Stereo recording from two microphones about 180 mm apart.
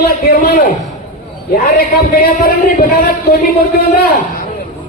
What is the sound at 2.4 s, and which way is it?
Speech, 55° left (ahead or behind).